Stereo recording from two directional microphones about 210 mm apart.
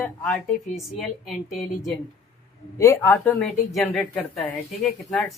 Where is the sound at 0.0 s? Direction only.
10° left (ahead or behind).